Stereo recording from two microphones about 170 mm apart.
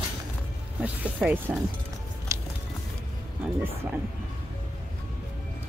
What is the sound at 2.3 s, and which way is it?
Music, 20° right (ahead or behind).